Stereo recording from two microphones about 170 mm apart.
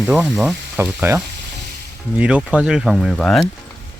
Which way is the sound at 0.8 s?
15° right (ahead or behind).